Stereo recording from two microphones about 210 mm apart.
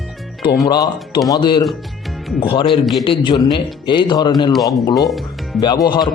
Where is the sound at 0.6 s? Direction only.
15° left (ahead or behind).